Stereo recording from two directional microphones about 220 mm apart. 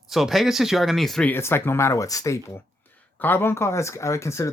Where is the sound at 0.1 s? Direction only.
Centre (ahead or behind).